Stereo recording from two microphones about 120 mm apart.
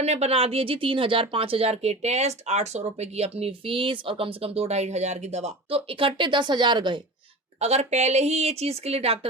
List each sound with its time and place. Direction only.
0.0 s speech: 65° right (ahead or behind); by 7.0 s 40° right (ahead or behind)
7.6 s speech: 65° right (ahead or behind)